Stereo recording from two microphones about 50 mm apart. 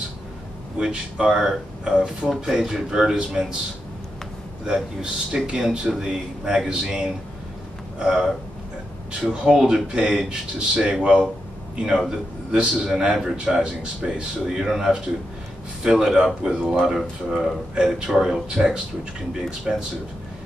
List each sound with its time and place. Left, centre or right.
0.7 s a man's voice: centre
4.6 s a man's voice: centre